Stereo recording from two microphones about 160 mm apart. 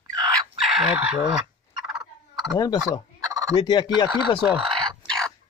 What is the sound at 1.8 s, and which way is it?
Turkey, centre (ahead or behind).